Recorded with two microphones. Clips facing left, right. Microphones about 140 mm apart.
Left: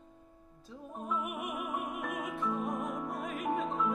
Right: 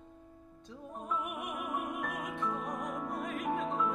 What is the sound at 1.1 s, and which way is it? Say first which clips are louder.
Music: left 1 dB; centre (ahead or behind).